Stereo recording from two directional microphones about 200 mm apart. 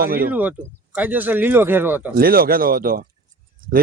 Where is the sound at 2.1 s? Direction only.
45° right (ahead or behind).